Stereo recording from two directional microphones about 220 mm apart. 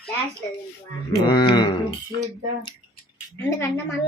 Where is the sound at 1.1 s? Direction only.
20° left (ahead or behind).